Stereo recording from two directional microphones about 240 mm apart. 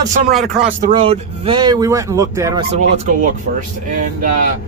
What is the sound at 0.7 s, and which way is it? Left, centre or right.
Speech, right.